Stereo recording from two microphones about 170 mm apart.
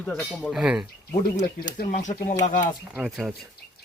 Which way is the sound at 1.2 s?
55° left (ahead or behind).